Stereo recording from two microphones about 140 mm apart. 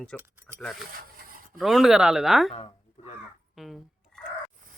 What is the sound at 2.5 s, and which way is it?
Speech, 45° left (ahead or behind).